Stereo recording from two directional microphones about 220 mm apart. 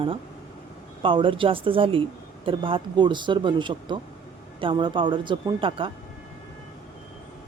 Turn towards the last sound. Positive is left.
turn(degrees=-20)  # may be behind; listen again after turning